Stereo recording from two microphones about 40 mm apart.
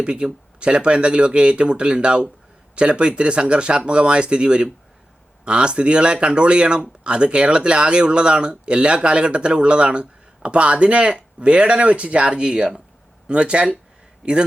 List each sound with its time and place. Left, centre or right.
0.0 s speech: right